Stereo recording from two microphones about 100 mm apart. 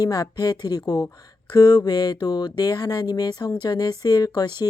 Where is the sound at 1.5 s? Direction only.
45° left (ahead or behind).